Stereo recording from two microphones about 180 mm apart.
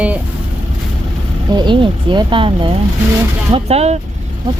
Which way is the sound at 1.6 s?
25° right (ahead or behind).